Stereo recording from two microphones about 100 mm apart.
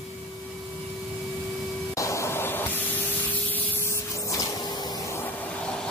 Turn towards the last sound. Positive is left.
turn(degrees=5)  # may be behind; listen again after turning